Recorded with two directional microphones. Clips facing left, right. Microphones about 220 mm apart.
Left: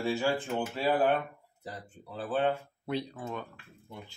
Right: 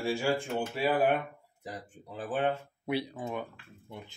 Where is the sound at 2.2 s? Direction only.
15° right (ahead or behind).